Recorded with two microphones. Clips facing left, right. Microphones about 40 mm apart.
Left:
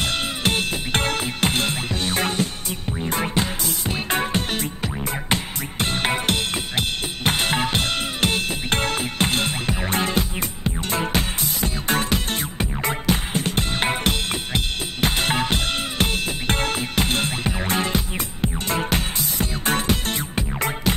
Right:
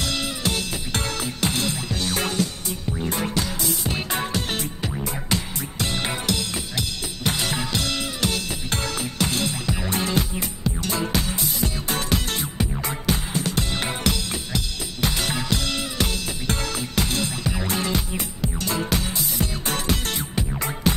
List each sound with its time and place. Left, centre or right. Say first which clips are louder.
0.0 s music: left 3 dB; left